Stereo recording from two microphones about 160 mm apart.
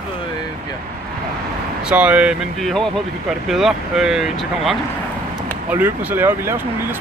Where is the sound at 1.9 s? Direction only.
10° right (ahead or behind).